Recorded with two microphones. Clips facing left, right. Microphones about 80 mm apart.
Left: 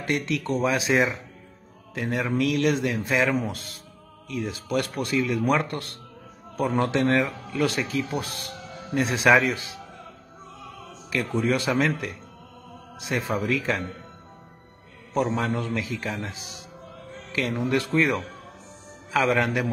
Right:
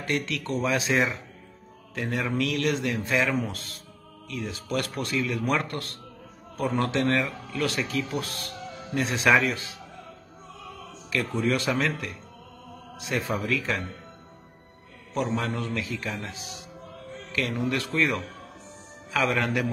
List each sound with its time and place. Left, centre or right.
0.2 s a man's voice: centre
11.1 s a man's voice: centre
15.1 s a man's voice: left
17.6 s a man's voice: left